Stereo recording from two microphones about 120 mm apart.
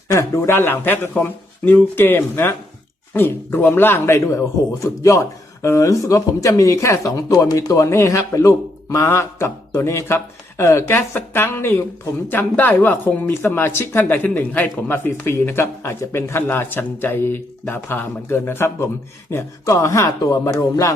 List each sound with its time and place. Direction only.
0.1 s speech: 25° left (ahead or behind)